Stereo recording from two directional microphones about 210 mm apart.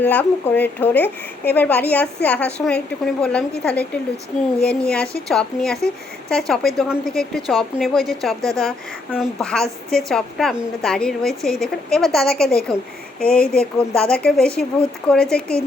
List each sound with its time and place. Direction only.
0.0 s a woman's voice: 10° left (ahead or behind)